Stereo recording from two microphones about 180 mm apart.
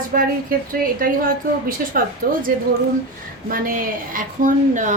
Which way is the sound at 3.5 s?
50° right (ahead or behind).